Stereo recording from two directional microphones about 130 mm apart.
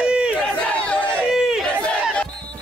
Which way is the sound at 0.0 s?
10° right (ahead or behind).